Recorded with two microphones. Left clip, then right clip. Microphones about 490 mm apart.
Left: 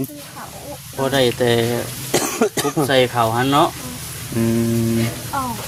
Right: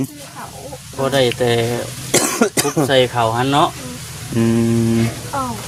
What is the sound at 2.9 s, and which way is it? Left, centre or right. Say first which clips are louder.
Speech: right 1 dB; left.